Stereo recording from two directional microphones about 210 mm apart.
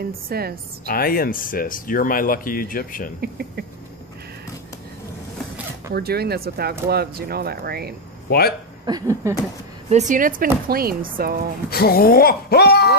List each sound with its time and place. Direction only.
0.0 s speech: 45° right (ahead or behind)
0.8 s speech: 45° left (ahead or behind)
3.2 s speech: 50° right (ahead or behind)
5.9 s speech: 50° right (ahead or behind)
8.3 s speech: 45° left (ahead or behind)
8.8 s a sound: 15° right (ahead or behind)
9.8 s speech: 35° right (ahead or behind)
11.7 s speech: 45° left (ahead or behind)